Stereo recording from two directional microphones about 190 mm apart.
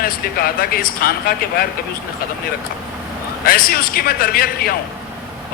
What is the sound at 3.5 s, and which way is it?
A man's voice, 50° left (ahead or behind).